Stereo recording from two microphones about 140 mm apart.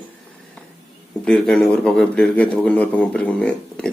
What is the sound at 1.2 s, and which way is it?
A man's voice, 5° left (ahead or behind).